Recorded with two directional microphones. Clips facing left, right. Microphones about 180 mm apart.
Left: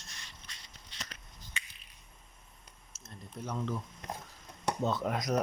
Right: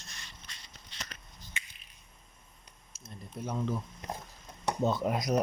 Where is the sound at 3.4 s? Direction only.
10° right (ahead or behind).